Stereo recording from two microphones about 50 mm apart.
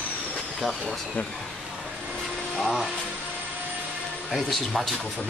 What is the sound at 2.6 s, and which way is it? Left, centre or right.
Speech, centre.